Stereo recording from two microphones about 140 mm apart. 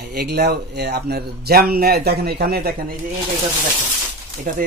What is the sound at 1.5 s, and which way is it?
A man's voice, 90° right.